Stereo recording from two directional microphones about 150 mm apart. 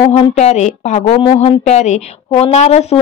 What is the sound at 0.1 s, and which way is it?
A woman's voice, 45° left (ahead or behind).